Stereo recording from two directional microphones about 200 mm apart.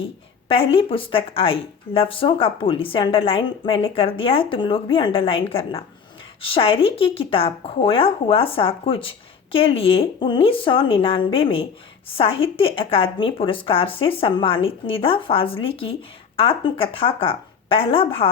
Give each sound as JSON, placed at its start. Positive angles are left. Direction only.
{"t": 0.4, "sound": "speech", "side_deg": 25}